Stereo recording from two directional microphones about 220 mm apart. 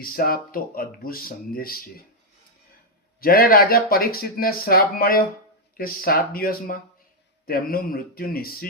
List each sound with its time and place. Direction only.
0.0 s speech: 40° left (ahead or behind)
3.2 s speech: 45° left (ahead or behind)